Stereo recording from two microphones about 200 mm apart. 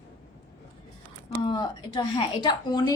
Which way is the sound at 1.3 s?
20° left (ahead or behind).